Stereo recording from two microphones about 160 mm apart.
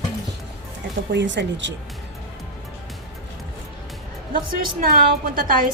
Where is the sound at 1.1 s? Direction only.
90° right.